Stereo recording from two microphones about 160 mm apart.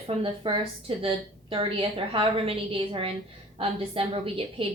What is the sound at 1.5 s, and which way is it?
A woman's voice, 35° right (ahead or behind).